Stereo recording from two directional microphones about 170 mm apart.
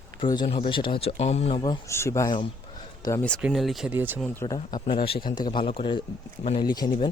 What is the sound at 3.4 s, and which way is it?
Speech, 5° right (ahead or behind).